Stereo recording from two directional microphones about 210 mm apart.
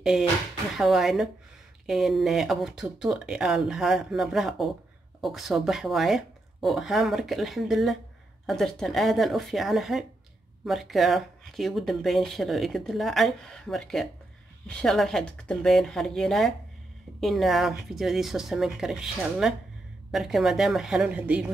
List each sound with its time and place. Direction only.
0.7 s speech: centre (ahead or behind)